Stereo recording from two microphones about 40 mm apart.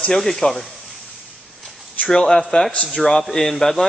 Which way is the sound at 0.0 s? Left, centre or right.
Centre.